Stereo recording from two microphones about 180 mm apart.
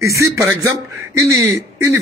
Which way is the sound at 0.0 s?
15° right (ahead or behind).